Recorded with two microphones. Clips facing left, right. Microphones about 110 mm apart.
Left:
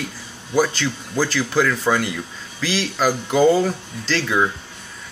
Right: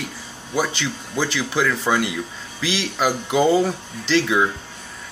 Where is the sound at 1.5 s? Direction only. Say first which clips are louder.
Left 1 dB; 5° right (ahead or behind).